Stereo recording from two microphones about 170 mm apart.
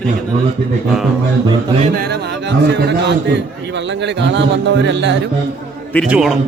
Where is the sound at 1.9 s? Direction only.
65° right (ahead or behind); by 5.2 s 90° right.